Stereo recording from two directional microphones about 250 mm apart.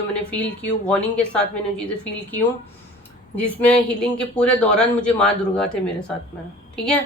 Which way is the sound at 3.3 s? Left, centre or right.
Centre.